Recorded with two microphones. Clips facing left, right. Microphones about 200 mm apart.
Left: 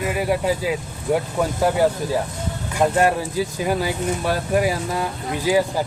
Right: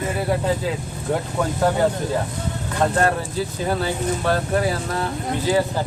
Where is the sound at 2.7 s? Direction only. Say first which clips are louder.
Left 2 dB; 10° left (ahead or behind).